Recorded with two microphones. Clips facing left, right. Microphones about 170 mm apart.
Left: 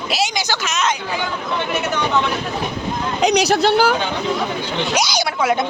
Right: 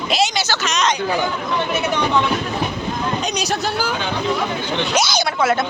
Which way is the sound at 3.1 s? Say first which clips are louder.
Left 7 dB; 75° left (ahead or behind).